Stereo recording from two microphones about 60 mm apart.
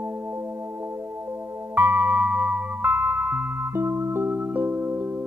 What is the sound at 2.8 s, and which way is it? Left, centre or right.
Music, right.